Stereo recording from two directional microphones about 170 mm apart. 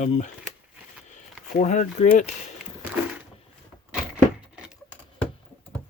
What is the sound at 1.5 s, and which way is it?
Speech, 50° left (ahead or behind).